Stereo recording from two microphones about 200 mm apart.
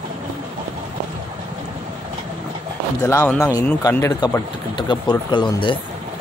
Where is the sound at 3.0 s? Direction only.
15° left (ahead or behind).